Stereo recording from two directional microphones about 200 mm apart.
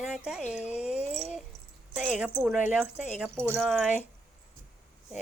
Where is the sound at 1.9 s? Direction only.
5° right (ahead or behind).